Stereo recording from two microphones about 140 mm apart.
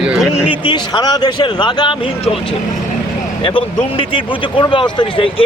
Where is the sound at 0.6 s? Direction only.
30° left (ahead or behind).